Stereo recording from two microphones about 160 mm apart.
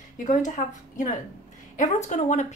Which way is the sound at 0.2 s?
50° left (ahead or behind).